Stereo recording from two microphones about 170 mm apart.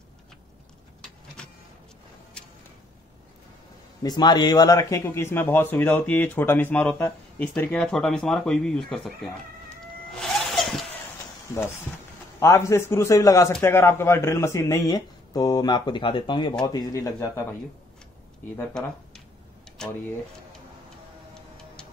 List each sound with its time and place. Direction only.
1.4 s vehicle: 5° left (ahead or behind)
4.0 s a man's voice: 25° left (ahead or behind); by 9.3 s centre (ahead or behind)
10.1 s zipper: centre (ahead or behind)
12.4 s a man's voice: 15° left (ahead or behind)
18.6 s speech: 5° left (ahead or behind)